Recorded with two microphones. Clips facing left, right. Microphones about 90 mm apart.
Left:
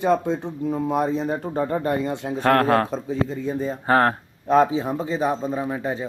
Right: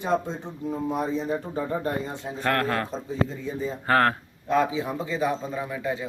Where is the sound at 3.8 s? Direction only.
25° left (ahead or behind).